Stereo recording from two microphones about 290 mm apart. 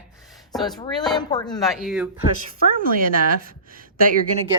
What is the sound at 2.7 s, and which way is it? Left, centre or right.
Speech, right.